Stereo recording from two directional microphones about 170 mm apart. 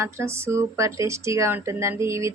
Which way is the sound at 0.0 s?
15° right (ahead or behind).